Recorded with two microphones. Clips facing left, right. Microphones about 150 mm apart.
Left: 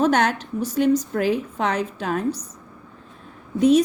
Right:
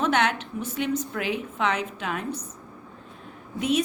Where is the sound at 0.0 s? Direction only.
40° left (ahead or behind).